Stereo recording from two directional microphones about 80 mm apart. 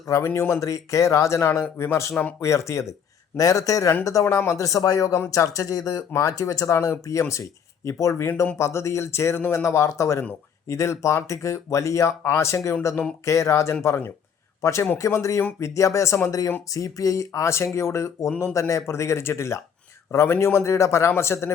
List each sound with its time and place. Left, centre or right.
0.0 s speech: left
0.3 s speech: left
0.6 s speech: left